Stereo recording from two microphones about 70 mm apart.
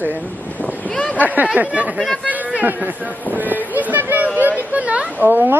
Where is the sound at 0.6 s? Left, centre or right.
Centre.